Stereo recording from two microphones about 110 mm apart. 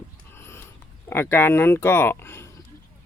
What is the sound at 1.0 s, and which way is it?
Speech, 20° left (ahead or behind).